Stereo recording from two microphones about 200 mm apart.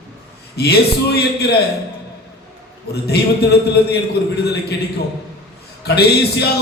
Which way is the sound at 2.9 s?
55° left (ahead or behind).